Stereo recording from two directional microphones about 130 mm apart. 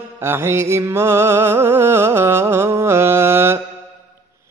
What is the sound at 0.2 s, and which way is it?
Mantra, 20° right (ahead or behind).